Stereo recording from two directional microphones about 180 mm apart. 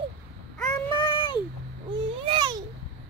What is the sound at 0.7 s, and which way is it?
Child singing, 25° left (ahead or behind).